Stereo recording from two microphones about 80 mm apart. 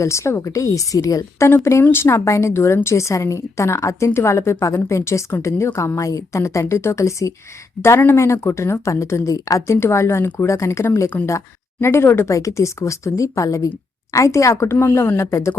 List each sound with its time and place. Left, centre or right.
0.0 s a woman's voice: left
1.5 s a woman's voice: left
14.8 s a woman's voice: left